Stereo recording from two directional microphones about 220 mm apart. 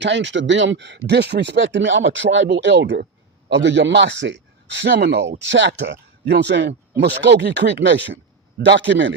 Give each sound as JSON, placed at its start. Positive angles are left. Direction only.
{"t": 0.0, "sound": "speech", "side_deg": -55}